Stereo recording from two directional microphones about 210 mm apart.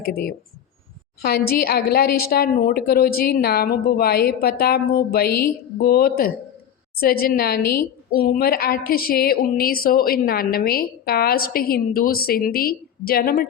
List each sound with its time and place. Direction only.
0.0 s a woman's voice: 45° left (ahead or behind)